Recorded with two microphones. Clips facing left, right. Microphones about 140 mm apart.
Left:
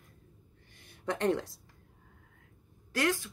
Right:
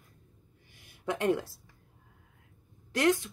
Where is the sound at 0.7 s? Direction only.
5° right (ahead or behind).